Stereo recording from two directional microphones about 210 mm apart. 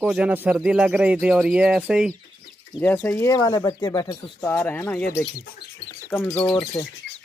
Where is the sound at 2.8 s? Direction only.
10° left (ahead or behind).